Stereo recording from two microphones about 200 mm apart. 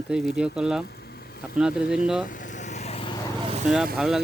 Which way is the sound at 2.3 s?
40° left (ahead or behind).